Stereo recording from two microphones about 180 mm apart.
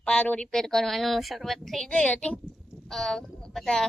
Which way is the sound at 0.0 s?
5° left (ahead or behind).